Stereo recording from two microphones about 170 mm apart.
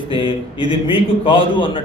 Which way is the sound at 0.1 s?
30° left (ahead or behind).